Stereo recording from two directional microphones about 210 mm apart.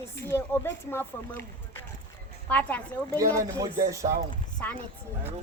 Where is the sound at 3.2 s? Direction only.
15° right (ahead or behind).